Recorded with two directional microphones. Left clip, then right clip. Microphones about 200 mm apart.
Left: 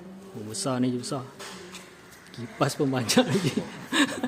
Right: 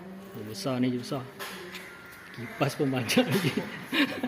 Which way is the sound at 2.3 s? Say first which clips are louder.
Left 3 dB; 25° left (ahead or behind).